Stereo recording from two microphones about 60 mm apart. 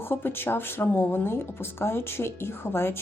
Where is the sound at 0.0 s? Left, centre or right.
Left.